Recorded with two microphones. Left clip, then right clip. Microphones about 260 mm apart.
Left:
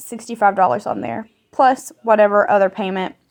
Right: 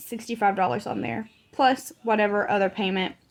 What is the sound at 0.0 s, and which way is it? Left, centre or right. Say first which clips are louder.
A woman's voice: left 8 dB; centre.